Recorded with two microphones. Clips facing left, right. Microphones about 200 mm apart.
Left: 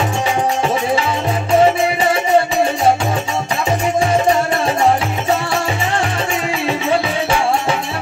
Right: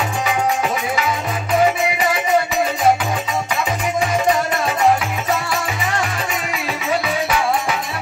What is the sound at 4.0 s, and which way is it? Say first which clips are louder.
Music: left 2 dB; 30° left (ahead or behind).